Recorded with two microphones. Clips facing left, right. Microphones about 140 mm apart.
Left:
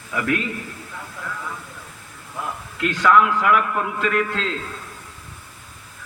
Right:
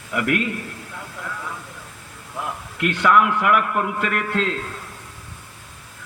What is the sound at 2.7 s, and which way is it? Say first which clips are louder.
A man's voice: left 1 dB; 60° right (ahead or behind).